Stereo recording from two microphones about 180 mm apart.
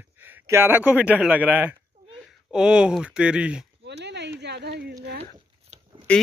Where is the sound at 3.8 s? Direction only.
70° right (ahead or behind).